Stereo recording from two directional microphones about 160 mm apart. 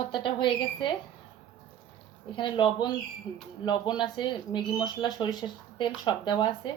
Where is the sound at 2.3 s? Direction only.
30° left (ahead or behind).